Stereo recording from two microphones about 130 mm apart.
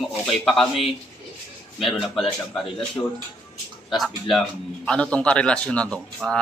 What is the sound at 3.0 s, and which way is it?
Speech, 25° left (ahead or behind).